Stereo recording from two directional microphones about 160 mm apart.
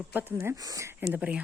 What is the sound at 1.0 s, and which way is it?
Speech, 5° right (ahead or behind).